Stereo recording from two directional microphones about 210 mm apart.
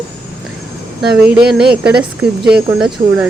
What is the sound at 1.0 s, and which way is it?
A woman's voice, 5° right (ahead or behind).